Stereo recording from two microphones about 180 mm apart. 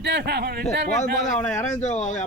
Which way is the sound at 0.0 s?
70° right (ahead or behind).